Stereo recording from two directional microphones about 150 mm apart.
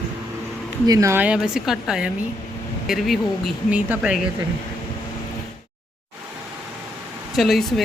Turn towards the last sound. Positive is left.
turn(degrees=0)  # may be behind; listen again after turning